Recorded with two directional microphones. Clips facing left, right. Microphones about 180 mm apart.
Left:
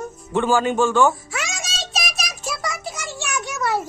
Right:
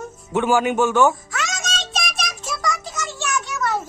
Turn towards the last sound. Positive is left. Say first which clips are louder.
# even
turn(degrees=15)  # may be behind; listen again after turning